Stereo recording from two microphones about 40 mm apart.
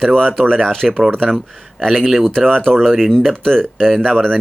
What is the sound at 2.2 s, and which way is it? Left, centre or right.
Speech, centre.